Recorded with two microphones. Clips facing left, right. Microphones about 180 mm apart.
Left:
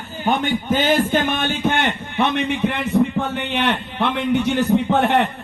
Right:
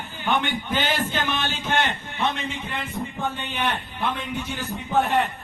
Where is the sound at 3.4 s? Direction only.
75° left (ahead or behind).